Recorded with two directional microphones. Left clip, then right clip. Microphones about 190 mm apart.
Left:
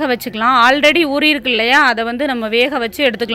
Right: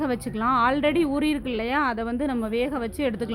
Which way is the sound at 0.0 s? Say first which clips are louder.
Left 10 dB; 15° left (ahead or behind).